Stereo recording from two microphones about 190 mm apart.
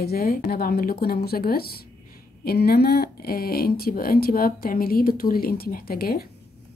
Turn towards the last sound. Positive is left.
turn(degrees=50)  # may be behind; listen again after turning